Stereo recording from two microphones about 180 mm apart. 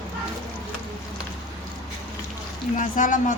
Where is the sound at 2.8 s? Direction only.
45° left (ahead or behind).